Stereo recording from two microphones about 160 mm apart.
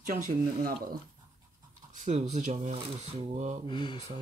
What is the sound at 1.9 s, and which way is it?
Speech, 50° right (ahead or behind).